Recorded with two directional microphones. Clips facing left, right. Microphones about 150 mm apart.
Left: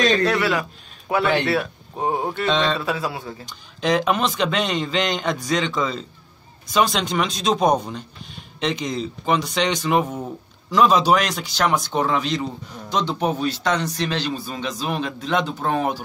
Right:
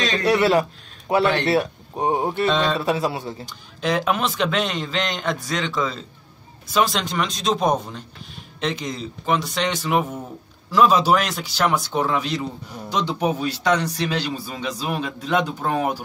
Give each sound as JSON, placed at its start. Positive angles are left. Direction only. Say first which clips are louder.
{"t": 0.4, "sound": "speech", "louder": "right 4 dB", "side_deg": -30}
{"t": 1.6, "sound": "speech", "louder": "right 2 dB", "side_deg": -20}
{"t": 2.4, "sound": "speech", "louder": "left 1 dB", "side_deg": -5}
{"t": 2.8, "sound": "a man's voice", "louder": "right 3 dB", "side_deg": -20}
{"t": 3.4, "sound": "speech", "louder": "left 4 dB", "side_deg": -5}